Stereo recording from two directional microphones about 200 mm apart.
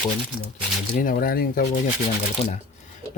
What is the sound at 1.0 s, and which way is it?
Speech, 45° left (ahead or behind).